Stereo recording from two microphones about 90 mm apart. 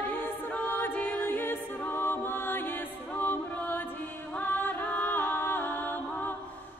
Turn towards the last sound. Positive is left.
turn(degrees=20)  # may be behind; listen again after turning